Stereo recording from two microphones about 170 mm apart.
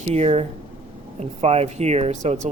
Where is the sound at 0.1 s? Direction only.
40° right (ahead or behind).